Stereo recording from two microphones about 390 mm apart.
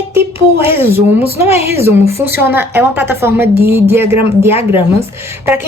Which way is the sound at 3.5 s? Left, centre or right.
Right.